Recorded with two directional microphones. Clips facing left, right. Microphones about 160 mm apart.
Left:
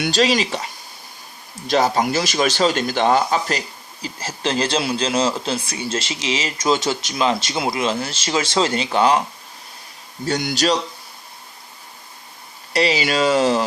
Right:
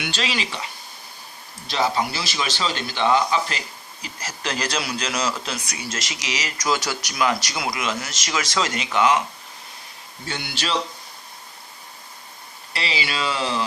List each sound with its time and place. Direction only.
0.0 s speech: 40° left (ahead or behind)
4.0 s a man's voice: 30° left (ahead or behind)
10.2 s speech: 40° left (ahead or behind)
12.7 s speech: 45° left (ahead or behind)